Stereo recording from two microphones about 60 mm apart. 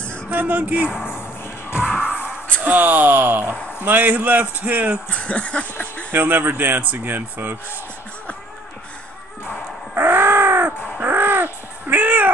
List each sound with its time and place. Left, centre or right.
0.3 s speech: right
1.9 s music: centre
2.6 s speech: right
5.1 s speech: left
6.1 s speech: right
9.9 s a sound: right
11.0 s crow: right